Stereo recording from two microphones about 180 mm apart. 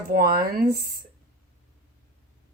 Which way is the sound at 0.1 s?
55° right (ahead or behind).